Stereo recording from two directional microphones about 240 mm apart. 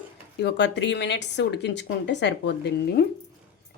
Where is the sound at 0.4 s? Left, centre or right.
Left.